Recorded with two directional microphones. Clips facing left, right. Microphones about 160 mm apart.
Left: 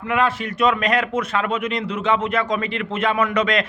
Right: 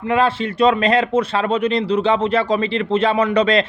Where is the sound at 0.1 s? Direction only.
30° right (ahead or behind).